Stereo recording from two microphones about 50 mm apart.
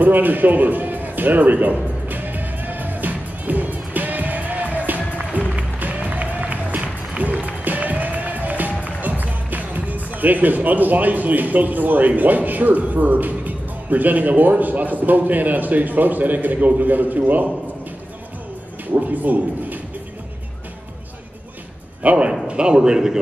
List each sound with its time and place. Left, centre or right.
0.0 s music: right
18.9 s a man's voice: right
22.0 s a man's voice: right